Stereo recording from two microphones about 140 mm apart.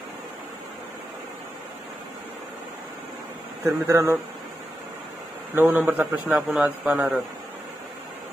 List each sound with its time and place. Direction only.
3.6 s speech: 20° right (ahead or behind)
5.5 s a man's voice: 15° right (ahead or behind)